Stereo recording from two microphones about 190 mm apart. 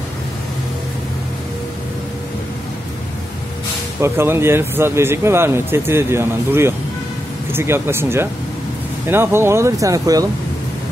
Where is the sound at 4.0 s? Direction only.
15° right (ahead or behind).